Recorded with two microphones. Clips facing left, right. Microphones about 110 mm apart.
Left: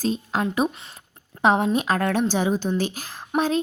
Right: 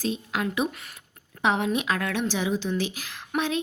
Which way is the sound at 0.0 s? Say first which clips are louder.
Left 4 dB; 35° left (ahead or behind).